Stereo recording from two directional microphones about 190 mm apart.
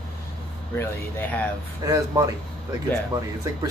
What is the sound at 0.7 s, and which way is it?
Speech, 10° left (ahead or behind).